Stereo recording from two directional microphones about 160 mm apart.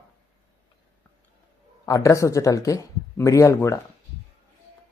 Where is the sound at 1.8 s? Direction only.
20° left (ahead or behind).